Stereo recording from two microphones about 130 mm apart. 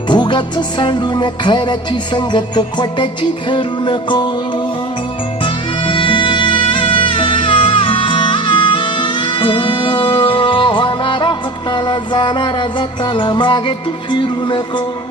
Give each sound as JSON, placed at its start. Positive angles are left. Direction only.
{"t": 0.1, "sound": "music", "side_deg": 35}
{"t": 5.8, "sound": "music", "side_deg": 40}